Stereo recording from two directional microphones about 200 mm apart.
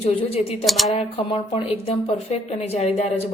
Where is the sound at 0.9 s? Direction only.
25° left (ahead or behind).